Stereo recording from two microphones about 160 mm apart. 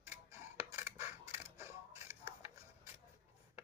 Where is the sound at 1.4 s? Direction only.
15° right (ahead or behind).